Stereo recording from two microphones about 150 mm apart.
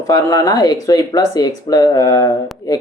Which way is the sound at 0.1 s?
25° left (ahead or behind).